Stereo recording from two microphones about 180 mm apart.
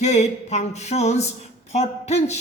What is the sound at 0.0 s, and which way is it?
Speech, 40° left (ahead or behind).